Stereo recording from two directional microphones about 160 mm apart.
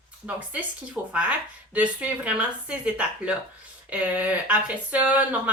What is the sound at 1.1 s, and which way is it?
Speech, 10° right (ahead or behind).